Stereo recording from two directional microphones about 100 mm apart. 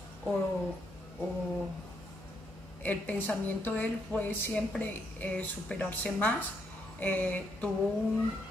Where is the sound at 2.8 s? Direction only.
15° left (ahead or behind).